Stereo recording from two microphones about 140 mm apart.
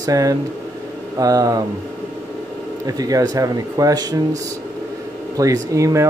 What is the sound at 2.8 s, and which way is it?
Speech, 25° right (ahead or behind).